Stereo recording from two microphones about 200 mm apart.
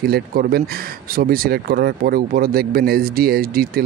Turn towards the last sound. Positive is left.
turn(degrees=-50)  # may be behind; listen again after turning